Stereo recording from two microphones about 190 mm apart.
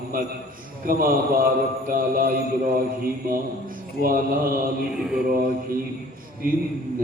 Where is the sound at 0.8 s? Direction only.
50° right (ahead or behind).